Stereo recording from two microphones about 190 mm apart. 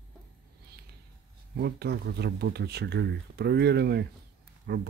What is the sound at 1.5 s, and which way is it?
Speech, 60° right (ahead or behind).